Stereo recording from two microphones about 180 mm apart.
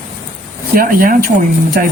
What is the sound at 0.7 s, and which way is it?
Speech, 50° right (ahead or behind).